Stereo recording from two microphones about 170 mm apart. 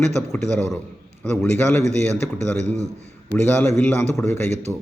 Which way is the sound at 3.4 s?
15° left (ahead or behind).